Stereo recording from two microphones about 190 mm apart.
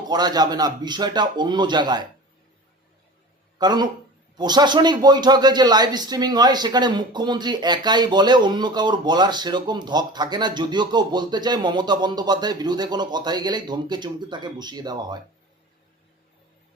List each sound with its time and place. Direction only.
0.1 s a man's voice: 20° right (ahead or behind)
3.6 s a man's voice: 20° right (ahead or behind)